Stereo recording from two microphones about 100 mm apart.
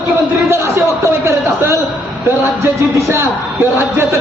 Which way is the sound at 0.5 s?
30° right (ahead or behind).